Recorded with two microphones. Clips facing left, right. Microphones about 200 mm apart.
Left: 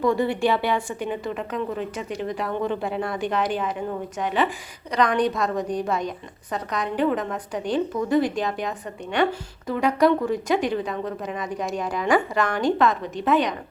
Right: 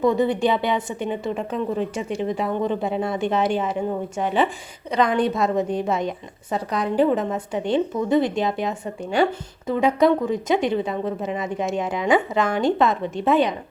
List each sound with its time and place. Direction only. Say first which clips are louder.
0.0 s speech: right 2 dB; 20° right (ahead or behind)
4.9 s speech: right 1 dB; 25° right (ahead or behind)